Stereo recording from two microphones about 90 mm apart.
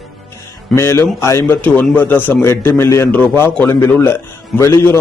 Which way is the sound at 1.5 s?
20° left (ahead or behind).